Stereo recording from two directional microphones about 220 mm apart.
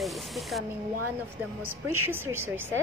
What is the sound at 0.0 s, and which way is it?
Spray, centre (ahead or behind).